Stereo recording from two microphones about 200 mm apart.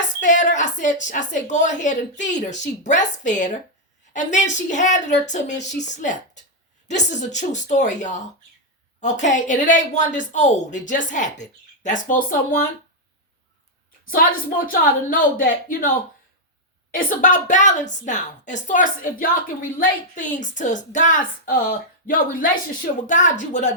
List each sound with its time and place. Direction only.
0.2 s a woman's voice: 40° left (ahead or behind)
14.7 s speech: 45° left (ahead or behind)
16.9 s a woman's voice: 45° left (ahead or behind)